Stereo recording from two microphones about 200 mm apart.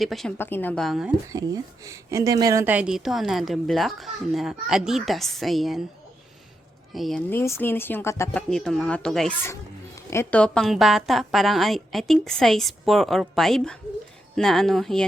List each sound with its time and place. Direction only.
0.0 s a woman's voice: centre (ahead or behind)
1.3 s a woman's voice: 15° right (ahead or behind); by 5.8 s centre (ahead or behind)
6.9 s a woman's voice: centre (ahead or behind)